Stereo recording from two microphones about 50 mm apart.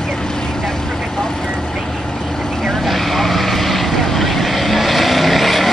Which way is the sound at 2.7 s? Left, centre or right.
Centre.